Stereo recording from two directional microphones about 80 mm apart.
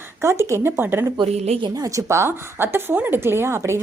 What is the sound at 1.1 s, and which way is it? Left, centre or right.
Speech, right.